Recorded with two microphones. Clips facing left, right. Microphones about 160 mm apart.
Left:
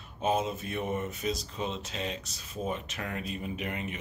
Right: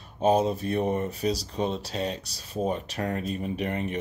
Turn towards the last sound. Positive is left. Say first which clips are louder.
# right 6 dB
turn(degrees=-40)  # may be behind; listen again after turning